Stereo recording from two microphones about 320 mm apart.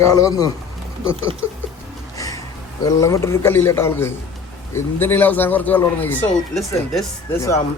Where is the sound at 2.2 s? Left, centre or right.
Centre.